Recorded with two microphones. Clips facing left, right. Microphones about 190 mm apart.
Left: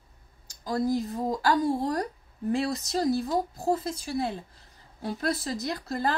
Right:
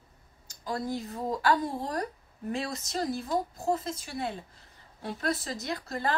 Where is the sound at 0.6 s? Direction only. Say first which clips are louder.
Left 6 dB; 35° left (ahead or behind).